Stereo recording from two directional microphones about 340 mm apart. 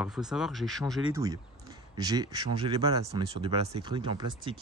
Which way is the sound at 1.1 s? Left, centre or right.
Centre.